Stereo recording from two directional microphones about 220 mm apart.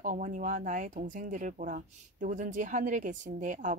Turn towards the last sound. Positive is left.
turn(degrees=-35)  # may be behind; listen again after turning